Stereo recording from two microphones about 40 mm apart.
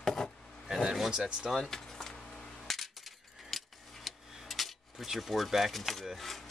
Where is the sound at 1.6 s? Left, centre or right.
Centre.